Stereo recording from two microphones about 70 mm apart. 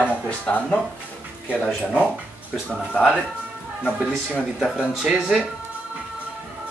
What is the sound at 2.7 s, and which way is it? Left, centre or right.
Speech, centre.